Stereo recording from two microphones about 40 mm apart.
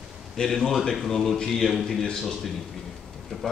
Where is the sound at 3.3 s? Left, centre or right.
Centre.